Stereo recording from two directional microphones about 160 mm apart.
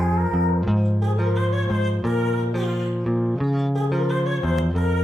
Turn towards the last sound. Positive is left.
turn(degrees=0)  # may be behind; listen again after turning